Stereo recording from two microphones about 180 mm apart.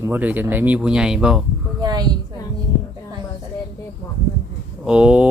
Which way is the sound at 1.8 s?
20° right (ahead or behind).